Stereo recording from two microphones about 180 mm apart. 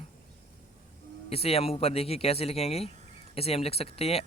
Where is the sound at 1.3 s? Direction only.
35° left (ahead or behind).